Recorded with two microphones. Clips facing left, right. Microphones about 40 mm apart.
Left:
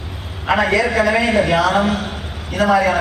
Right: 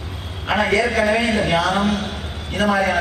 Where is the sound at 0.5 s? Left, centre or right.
Left.